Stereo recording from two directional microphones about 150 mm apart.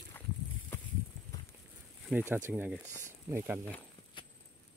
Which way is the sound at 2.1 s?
10° right (ahead or behind).